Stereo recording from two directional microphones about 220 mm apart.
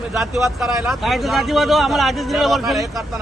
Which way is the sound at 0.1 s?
Centre (ahead or behind).